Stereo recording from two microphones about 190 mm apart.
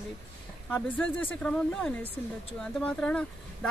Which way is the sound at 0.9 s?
5° left (ahead or behind).